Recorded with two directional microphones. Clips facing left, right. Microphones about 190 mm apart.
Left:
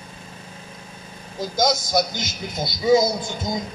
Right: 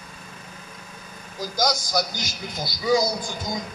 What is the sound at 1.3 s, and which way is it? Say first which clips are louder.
A man's voice: left 4 dB; 25° left (ahead or behind).